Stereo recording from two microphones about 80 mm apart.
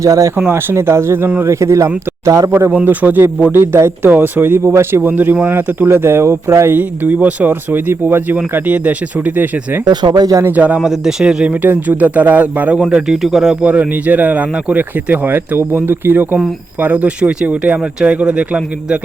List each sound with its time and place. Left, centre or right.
0.0 s speech: right
0.3 s speech: right
2.5 s speech: right
6.7 s speech: right
9.8 s speech: right
10.4 s speech: centre
10.8 s speech: centre
11.6 s speech: right
12.9 s speech: centre